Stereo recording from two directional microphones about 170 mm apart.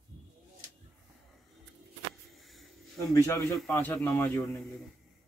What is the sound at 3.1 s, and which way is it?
Speech, 20° left (ahead or behind).